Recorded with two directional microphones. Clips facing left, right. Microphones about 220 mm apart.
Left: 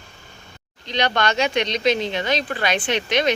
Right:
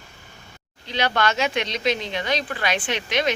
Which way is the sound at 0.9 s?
5° right (ahead or behind).